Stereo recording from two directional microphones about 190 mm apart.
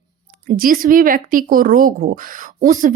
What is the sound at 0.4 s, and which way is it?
Speech, 50° right (ahead or behind).